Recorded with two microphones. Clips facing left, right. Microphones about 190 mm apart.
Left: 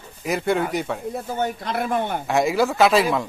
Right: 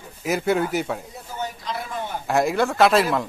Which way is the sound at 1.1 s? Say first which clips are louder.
Left 7 dB; 60° left (ahead or behind).